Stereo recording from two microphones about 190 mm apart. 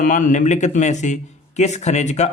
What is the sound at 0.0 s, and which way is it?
A man's voice, 40° left (ahead or behind).